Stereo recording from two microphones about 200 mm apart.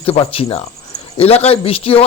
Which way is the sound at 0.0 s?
30° left (ahead or behind).